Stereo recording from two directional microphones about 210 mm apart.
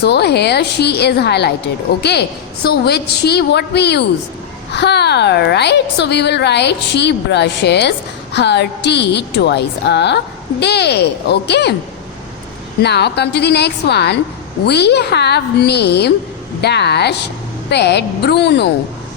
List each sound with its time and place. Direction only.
0.0 s a woman's voice: 50° left (ahead or behind)
12.8 s a woman's voice: 50° left (ahead or behind)